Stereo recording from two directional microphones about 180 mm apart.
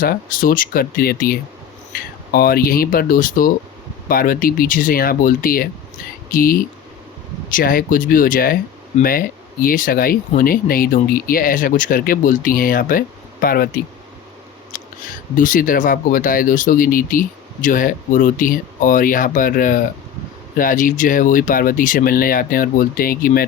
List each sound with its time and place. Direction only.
0.0 s speech: 50° left (ahead or behind)
15.4 s speech: 50° left (ahead or behind)